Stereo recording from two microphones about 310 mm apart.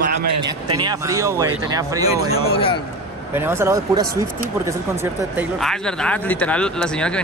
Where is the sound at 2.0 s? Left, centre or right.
Centre.